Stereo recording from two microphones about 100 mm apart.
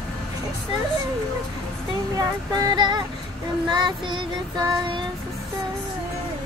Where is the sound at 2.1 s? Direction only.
45° right (ahead or behind).